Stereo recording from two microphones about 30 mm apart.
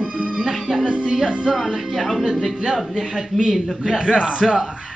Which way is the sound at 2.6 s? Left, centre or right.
Centre.